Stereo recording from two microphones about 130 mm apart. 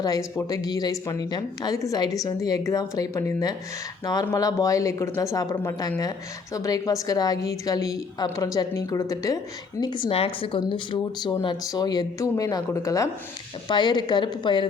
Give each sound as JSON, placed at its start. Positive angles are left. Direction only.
{"t": 0.0, "sound": "a woman's voice", "side_deg": 25}
{"t": 9.8, "sound": "a woman's voice", "side_deg": 35}
{"t": 13.7, "sound": "speech", "side_deg": 35}